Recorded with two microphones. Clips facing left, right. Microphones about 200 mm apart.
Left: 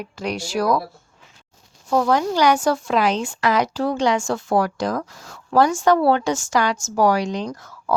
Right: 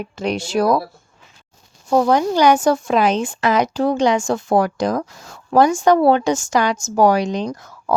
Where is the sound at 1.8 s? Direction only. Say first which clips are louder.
Right 3 dB; 20° right (ahead or behind).